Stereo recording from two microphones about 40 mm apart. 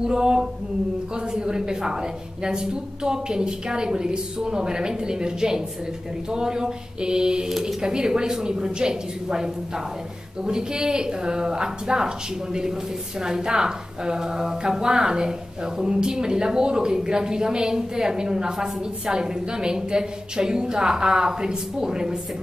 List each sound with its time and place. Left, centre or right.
0.0 s a woman's voice: centre
13.2 s a woman's voice: centre